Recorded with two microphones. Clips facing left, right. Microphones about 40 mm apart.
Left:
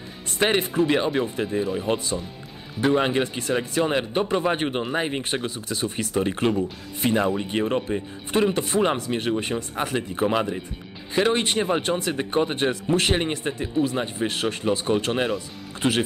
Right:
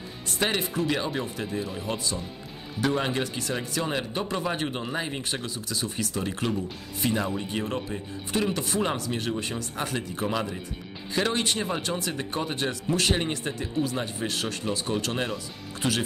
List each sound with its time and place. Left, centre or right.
0.4 s speech: left